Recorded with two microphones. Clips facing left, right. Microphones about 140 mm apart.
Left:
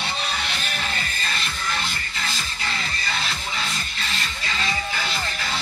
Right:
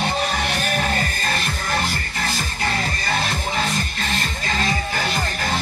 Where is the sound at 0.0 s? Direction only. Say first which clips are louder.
Right 7 dB; 45° right (ahead or behind).